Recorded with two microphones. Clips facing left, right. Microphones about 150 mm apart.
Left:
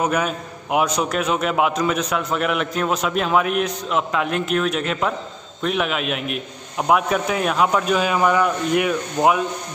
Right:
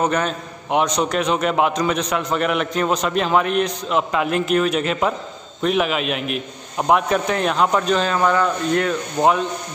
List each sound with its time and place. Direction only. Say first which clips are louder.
0.0 s a man's voice: right 1 dB; 10° left (ahead or behind)